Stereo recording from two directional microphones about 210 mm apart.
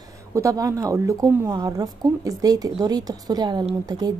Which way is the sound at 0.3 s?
15° right (ahead or behind).